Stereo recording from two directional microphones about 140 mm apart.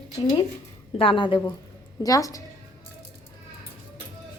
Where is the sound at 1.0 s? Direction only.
35° left (ahead or behind).